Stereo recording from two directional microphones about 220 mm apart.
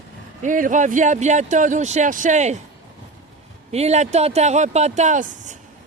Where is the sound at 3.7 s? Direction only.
30° right (ahead or behind).